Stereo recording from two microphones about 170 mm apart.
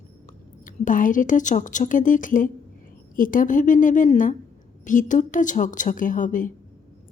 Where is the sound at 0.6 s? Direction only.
50° left (ahead or behind).